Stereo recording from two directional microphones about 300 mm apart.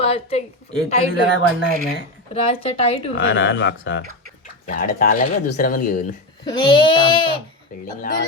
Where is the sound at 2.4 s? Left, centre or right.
Centre.